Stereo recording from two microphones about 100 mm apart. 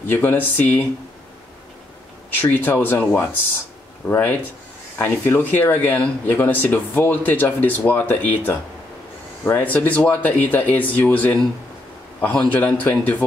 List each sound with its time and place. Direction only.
0.0 s speech: 20° left (ahead or behind)
2.3 s speech: 20° left (ahead or behind)